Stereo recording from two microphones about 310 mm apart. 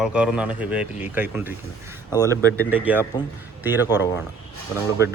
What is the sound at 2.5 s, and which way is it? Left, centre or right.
Speech, centre.